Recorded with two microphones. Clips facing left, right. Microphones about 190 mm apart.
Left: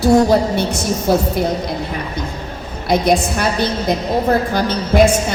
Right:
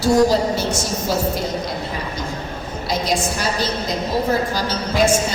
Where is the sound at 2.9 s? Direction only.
55° left (ahead or behind).